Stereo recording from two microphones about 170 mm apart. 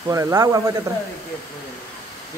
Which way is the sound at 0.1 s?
20° right (ahead or behind).